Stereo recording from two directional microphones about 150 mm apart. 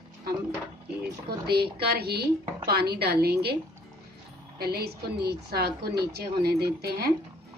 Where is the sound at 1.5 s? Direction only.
90° right.